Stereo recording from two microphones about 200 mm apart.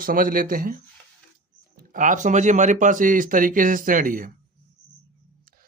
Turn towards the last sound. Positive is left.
turn(degrees=-45)  # may be behind; listen again after turning